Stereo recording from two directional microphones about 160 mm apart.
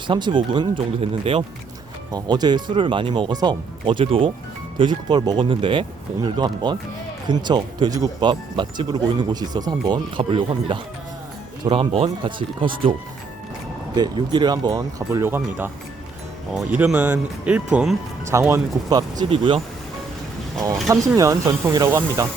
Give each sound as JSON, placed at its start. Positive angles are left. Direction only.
{"t": 0.1, "sound": "speech", "side_deg": -30}
{"t": 13.9, "sound": "speech", "side_deg": -25}
{"t": 16.7, "sound": "speech", "side_deg": -10}
{"t": 18.3, "sound": "speech", "side_deg": -15}
{"t": 20.8, "sound": "speech", "side_deg": -20}